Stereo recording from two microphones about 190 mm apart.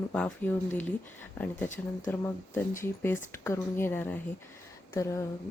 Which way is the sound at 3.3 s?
10° left (ahead or behind).